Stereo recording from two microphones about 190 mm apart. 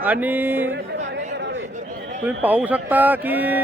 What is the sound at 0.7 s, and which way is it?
Chatter, 65° right (ahead or behind).